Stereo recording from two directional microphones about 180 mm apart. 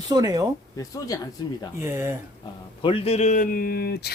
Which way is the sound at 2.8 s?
30° left (ahead or behind).